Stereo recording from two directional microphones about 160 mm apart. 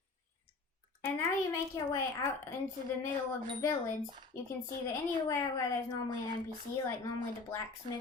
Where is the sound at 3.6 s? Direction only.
20° left (ahead or behind).